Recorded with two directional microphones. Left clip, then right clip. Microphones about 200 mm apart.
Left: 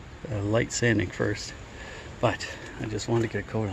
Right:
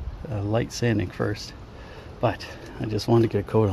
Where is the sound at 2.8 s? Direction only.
30° right (ahead or behind).